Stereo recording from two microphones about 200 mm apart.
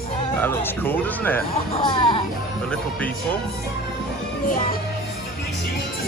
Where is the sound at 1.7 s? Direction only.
25° left (ahead or behind).